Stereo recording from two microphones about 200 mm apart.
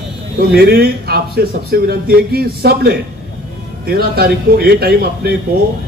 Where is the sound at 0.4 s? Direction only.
50° right (ahead or behind).